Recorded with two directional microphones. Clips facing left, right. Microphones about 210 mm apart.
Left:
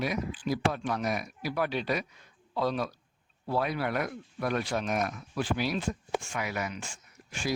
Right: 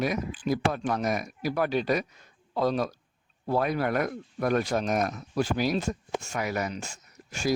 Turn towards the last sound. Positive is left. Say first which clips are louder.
# right 4 dB
turn(degrees=-40)  # may be behind; listen again after turning